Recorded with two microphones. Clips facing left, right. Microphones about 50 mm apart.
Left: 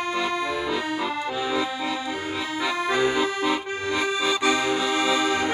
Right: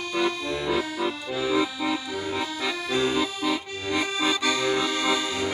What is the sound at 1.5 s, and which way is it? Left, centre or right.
Accordion, centre.